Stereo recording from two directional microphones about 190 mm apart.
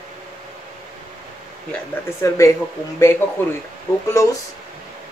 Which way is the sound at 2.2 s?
15° left (ahead or behind).